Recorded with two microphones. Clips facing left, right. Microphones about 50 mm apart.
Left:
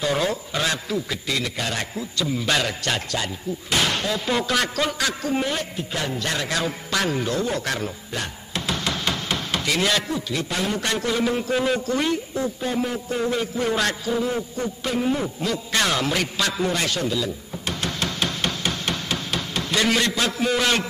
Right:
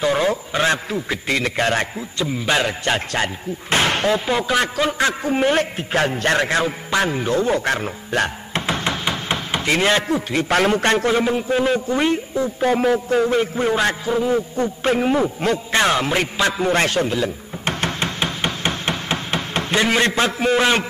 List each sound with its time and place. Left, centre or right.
0.0 s a man's voice: right
2.0 s a man's voice: right
3.7 s slam: right
4.3 s a man's voice: centre
5.4 s a man's voice: right
6.6 s a man's voice: right
8.1 s a man's voice: right
8.5 s chopping: right
9.7 s a man's voice: right
10.1 s a man's voice: right
12.5 s a man's voice: right
13.2 s a man's voice: right
16.7 s a sound: right